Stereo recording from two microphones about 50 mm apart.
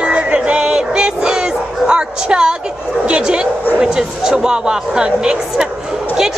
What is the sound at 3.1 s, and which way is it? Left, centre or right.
A woman's voice, centre.